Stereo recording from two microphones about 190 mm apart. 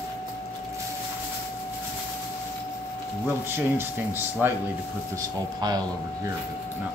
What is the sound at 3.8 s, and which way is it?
Speech, 10° right (ahead or behind).